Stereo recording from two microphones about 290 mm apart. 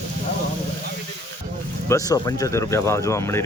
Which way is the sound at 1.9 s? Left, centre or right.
Centre.